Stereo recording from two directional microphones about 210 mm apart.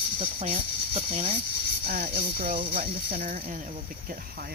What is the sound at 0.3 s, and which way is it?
Speech, 25° right (ahead or behind).